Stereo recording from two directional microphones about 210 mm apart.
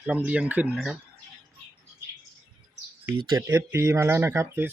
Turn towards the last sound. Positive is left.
turn(degrees=-10)  # may be behind; listen again after turning